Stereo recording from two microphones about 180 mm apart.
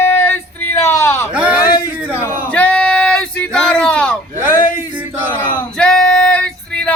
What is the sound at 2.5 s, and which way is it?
Speech, 5° left (ahead or behind).